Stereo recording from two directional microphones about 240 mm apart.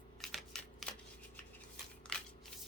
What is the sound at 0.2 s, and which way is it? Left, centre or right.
Shuffling cards, centre.